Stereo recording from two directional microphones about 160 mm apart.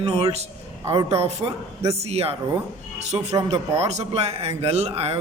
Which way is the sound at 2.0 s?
40° right (ahead or behind).